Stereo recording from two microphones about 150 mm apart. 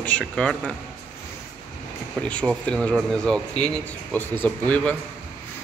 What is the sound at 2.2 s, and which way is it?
Speech, 5° left (ahead or behind).